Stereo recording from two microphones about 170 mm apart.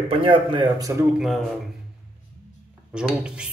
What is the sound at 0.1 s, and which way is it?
Speech, 30° right (ahead or behind).